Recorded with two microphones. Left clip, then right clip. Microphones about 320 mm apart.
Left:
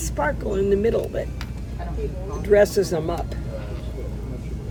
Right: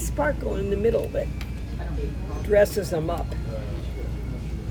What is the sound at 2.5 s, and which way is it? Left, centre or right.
Speech, left.